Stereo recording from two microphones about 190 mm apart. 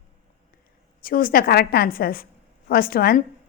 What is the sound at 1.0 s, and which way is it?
A woman's voice, 50° left (ahead or behind).